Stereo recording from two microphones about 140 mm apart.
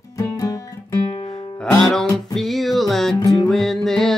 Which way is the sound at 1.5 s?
5° left (ahead or behind).